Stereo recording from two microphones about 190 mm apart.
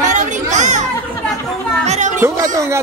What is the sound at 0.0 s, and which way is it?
Children playing, 40° right (ahead or behind).